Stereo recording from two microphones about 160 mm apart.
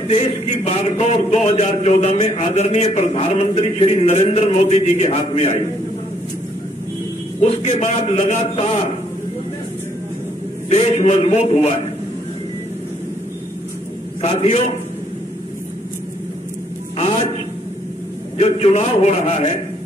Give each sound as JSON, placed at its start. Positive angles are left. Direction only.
{"t": 0.1, "sound": "a man's voice", "side_deg": 45}
{"t": 7.4, "sound": "a man's voice", "side_deg": 45}
{"t": 10.7, "sound": "a man's voice", "side_deg": 40}
{"t": 14.2, "sound": "a man's voice", "side_deg": 40}
{"t": 18.4, "sound": "a man's voice", "side_deg": 40}